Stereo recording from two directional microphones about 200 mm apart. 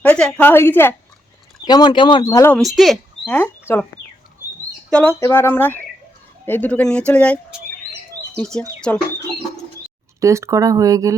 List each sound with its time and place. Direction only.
0.0 s speech: 5° left (ahead or behind)
2.7 s speech: centre (ahead or behind)
3.3 s speech: 10° left (ahead or behind)
4.9 s speech: 5° left (ahead or behind)
8.4 s speech: 5° left (ahead or behind)
10.2 s speech: 15° right (ahead or behind)